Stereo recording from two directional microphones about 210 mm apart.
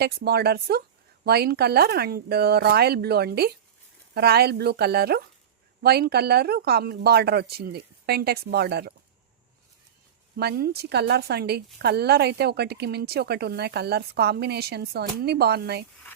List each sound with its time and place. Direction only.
0.0 s a woman's voice: 50° right (ahead or behind)
10.3 s a woman's voice: 50° right (ahead or behind)